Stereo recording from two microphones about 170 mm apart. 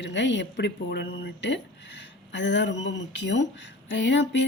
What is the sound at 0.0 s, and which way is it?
Speech, 90° left.